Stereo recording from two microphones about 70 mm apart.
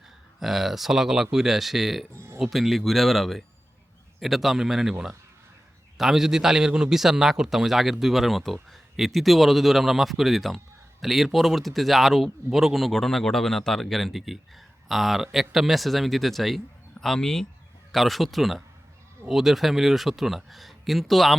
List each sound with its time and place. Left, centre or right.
0.3 s speech: centre
2.1 s a sound: right
2.4 s speech: centre